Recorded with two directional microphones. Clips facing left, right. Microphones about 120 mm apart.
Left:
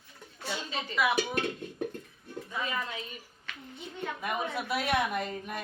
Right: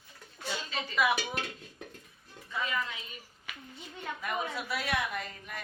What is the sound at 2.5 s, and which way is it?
Speech, 25° left (ahead or behind).